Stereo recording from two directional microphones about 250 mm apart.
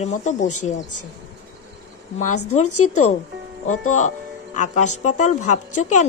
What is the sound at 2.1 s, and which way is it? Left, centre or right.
Speech, left.